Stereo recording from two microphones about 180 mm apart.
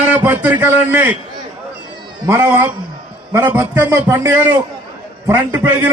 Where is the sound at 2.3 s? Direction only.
10° right (ahead or behind).